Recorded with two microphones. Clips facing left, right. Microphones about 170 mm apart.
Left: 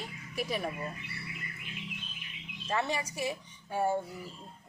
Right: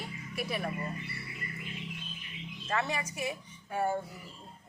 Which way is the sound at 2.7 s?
30° left (ahead or behind).